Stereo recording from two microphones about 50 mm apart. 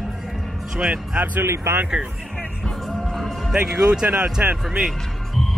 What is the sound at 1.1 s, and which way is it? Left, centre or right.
Speech, right.